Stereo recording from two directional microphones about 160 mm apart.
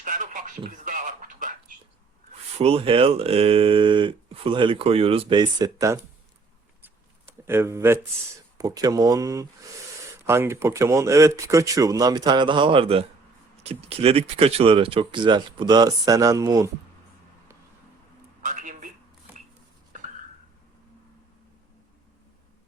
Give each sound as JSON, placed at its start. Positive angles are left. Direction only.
{"t": 0.0, "sound": "speech", "side_deg": -55}
{"t": 0.9, "sound": "a sound", "side_deg": -55}
{"t": 2.6, "sound": "speech", "side_deg": -35}
{"t": 6.8, "sound": "a sound", "side_deg": -15}
{"t": 8.5, "sound": "speech", "side_deg": -25}
{"t": 18.4, "sound": "telephone", "side_deg": -55}